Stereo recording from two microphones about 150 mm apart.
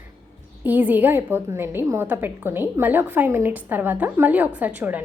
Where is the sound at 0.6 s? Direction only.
10° right (ahead or behind).